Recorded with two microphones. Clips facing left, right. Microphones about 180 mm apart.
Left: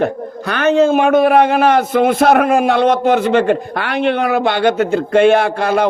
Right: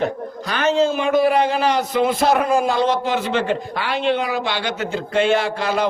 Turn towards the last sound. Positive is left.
turn(degrees=55)  # may be behind; listen again after turning